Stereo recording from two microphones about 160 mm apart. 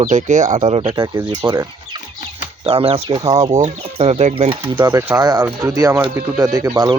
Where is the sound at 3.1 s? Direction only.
25° right (ahead or behind).